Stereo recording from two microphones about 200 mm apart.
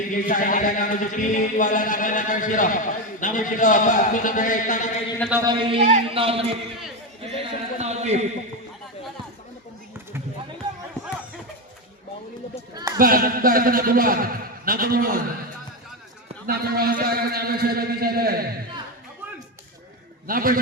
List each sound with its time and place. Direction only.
0.1 s speech: 40° left (ahead or behind)
5.3 s a man's voice: 20° right (ahead or behind)
7.2 s a sound: 30° right (ahead or behind)
10.6 s run: 20° right (ahead or behind)
13.0 s a man's voice: 45° right (ahead or behind)
16.5 s a man's voice: 50° right (ahead or behind)
20.2 s a man's voice: 45° right (ahead or behind)